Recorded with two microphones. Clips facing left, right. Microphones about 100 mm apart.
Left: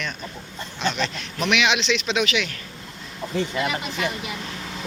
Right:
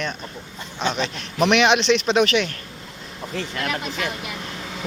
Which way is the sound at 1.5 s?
40° right (ahead or behind).